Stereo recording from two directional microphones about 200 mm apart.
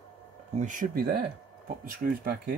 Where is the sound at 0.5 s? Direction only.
40° right (ahead or behind).